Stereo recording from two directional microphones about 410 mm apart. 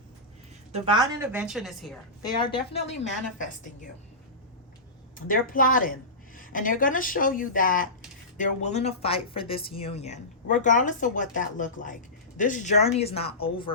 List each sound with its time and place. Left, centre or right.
0.7 s a woman's voice: centre
2.4 s speech: centre
5.1 s a woman's voice: centre